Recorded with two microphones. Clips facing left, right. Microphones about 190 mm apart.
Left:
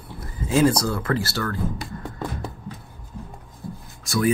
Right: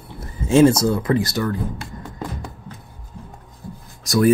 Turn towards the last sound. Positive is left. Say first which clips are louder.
# right 6 dB
turn(degrees=-45)  # may be behind; listen again after turning